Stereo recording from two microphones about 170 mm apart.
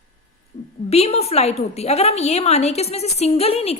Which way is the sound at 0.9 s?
40° left (ahead or behind).